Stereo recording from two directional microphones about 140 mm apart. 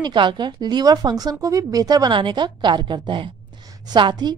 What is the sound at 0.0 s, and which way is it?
A woman's voice, 35° right (ahead or behind).